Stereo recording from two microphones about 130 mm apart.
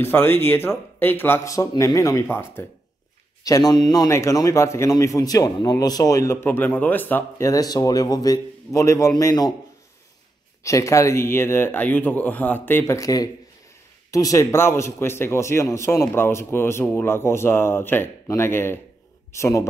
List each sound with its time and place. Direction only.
0.0 s a man's voice: 15° left (ahead or behind)
10.6 s a man's voice: 25° left (ahead or behind)